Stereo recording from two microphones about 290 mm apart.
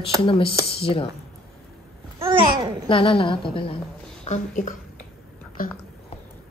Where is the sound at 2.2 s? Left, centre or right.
Centre.